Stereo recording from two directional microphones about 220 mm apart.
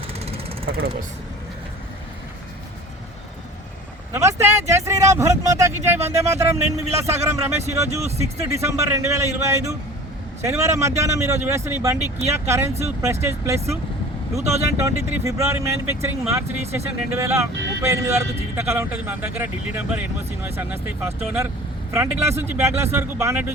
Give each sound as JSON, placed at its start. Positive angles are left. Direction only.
{"t": 0.6, "sound": "speech", "side_deg": -45}
{"t": 4.1, "sound": "a man's voice", "side_deg": -10}